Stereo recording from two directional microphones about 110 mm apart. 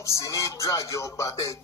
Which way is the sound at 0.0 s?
30° left (ahead or behind).